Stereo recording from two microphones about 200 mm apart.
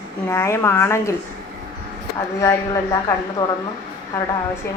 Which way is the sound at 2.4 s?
15° left (ahead or behind).